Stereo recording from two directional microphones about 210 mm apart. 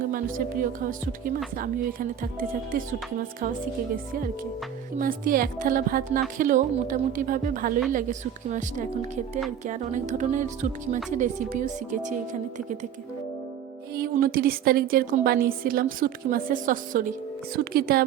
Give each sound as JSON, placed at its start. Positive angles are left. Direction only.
{"t": 0.1, "sound": "speech", "side_deg": -40}
{"t": 4.9, "sound": "speech", "side_deg": -40}
{"t": 13.9, "sound": "speech", "side_deg": -45}